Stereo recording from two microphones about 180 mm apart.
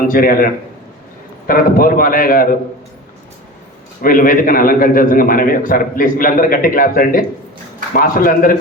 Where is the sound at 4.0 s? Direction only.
50° left (ahead or behind).